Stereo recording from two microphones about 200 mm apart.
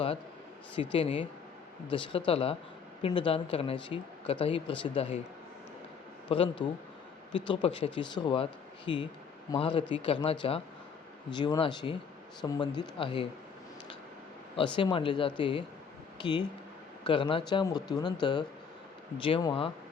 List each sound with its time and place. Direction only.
0.9 s speech: 25° left (ahead or behind)
6.2 s a man's voice: 25° left (ahead or behind)
14.5 s speech: 25° left (ahead or behind)